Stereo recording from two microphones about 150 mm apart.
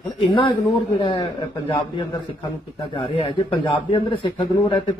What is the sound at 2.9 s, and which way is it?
A man's voice, 40° left (ahead or behind).